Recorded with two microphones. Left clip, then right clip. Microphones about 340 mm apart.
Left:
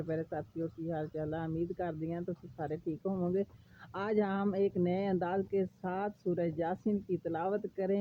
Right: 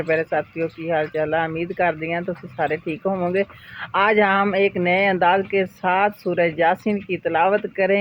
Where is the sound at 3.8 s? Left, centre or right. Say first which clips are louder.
Right 17 dB; left.